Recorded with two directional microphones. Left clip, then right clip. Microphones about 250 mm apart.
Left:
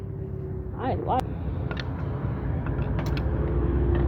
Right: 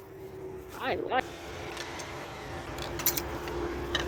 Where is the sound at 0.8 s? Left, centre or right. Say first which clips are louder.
Left 4 dB; right.